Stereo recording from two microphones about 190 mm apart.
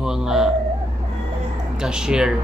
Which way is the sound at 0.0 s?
5° right (ahead or behind).